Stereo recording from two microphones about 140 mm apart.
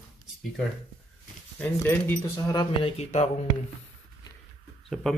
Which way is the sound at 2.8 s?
50° left (ahead or behind).